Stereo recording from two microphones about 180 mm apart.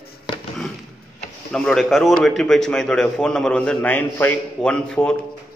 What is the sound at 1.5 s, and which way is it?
A man's voice, 5° left (ahead or behind).